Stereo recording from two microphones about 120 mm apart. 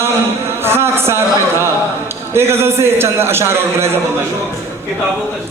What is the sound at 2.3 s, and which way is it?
A man's voice, 20° right (ahead or behind).